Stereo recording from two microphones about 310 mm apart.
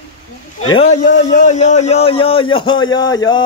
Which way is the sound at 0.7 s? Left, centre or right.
Centre.